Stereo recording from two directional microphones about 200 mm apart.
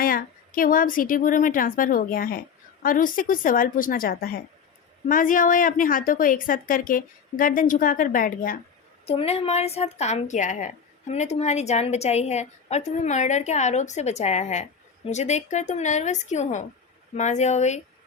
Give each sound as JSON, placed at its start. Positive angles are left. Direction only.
{"t": 0.0, "sound": "a woman's voice", "side_deg": 45}
{"t": 9.0, "sound": "a woman's voice", "side_deg": 30}